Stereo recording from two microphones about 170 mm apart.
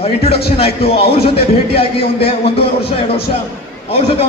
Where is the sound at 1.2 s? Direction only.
35° left (ahead or behind).